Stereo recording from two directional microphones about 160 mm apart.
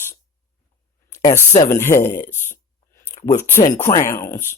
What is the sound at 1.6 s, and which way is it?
Speech, 15° left (ahead or behind).